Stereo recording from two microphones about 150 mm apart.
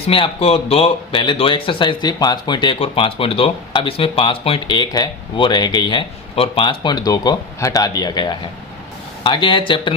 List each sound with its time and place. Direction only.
0.1 s speech: 40° left (ahead or behind)